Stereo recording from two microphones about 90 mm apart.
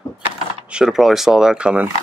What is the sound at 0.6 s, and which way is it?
Speech, 10° right (ahead or behind).